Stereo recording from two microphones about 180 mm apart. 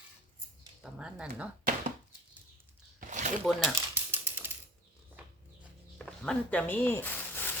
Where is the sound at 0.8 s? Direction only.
5° right (ahead or behind).